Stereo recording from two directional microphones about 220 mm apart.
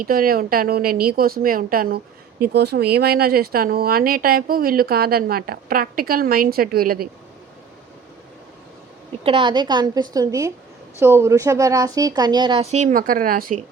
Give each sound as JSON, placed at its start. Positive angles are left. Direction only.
{"t": 0.0, "sound": "a woman's voice", "side_deg": -40}
{"t": 9.2, "sound": "a woman's voice", "side_deg": -20}